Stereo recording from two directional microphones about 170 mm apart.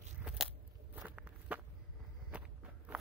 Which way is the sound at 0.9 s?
10° right (ahead or behind).